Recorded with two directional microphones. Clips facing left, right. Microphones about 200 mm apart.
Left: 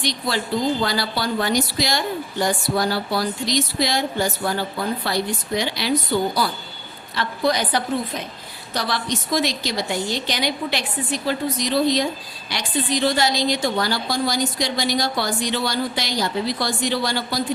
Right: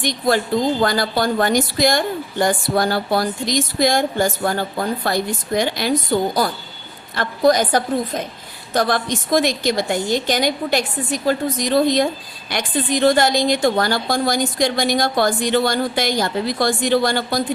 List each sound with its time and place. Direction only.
0.0 s a woman's voice: 50° right (ahead or behind)